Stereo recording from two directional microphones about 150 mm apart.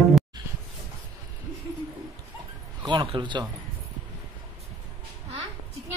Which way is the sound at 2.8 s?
35° right (ahead or behind).